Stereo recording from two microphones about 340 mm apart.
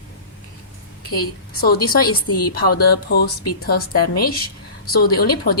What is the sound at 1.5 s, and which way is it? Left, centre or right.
A woman's voice, left.